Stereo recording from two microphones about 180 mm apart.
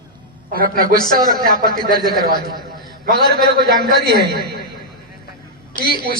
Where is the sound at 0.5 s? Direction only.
55° right (ahead or behind).